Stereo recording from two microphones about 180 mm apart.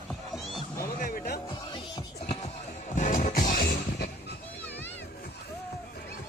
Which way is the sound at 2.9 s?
40° left (ahead or behind).